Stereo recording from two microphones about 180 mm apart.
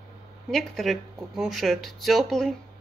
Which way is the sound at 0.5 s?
Centre (ahead or behind).